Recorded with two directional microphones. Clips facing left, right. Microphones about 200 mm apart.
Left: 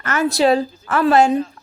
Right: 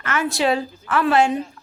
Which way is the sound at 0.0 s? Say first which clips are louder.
Left 5 dB; 40° left (ahead or behind).